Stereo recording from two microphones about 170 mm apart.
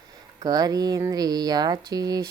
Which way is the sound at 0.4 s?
25° right (ahead or behind).